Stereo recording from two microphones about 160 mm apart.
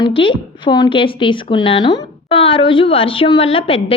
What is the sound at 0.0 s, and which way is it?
A woman's voice, 30° left (ahead or behind).